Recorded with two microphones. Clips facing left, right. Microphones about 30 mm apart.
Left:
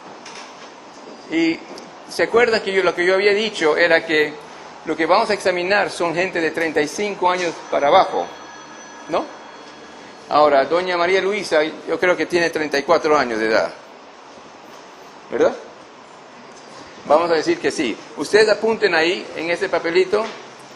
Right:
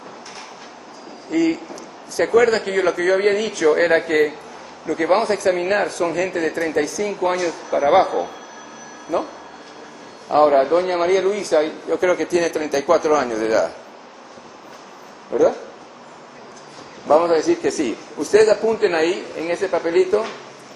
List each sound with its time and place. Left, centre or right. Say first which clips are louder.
1.3 s a man's voice: even; left
2.1 s a man's voice: even; left
9.1 s a man's voice: left 1 dB; left
15.3 s a man's voice: right 1 dB; left
17.1 s a man's voice: right 1 dB; left